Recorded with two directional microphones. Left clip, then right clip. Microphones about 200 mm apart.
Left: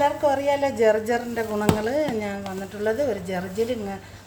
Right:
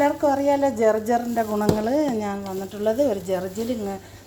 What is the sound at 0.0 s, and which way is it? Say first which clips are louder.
A woman's voice: right 1 dB; 30° right (ahead or behind).